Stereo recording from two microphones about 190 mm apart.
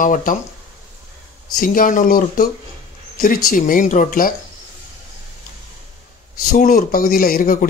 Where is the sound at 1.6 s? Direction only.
45° left (ahead or behind).